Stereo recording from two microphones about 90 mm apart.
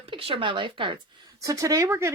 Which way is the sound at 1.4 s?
40° right (ahead or behind).